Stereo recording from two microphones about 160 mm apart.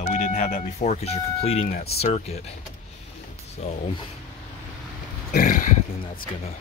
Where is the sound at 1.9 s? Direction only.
40° left (ahead or behind).